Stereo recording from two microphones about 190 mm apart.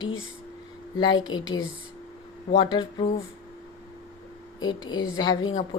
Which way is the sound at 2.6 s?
20° left (ahead or behind).